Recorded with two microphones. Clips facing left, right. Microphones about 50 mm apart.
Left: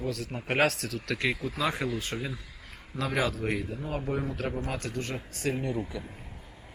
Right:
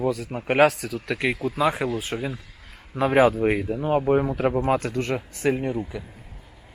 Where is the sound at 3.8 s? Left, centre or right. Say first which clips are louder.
Right 11 dB; right.